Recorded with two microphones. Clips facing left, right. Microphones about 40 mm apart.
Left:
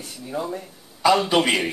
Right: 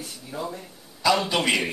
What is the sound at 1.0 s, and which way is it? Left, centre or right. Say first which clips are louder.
Speech: left 4 dB; left.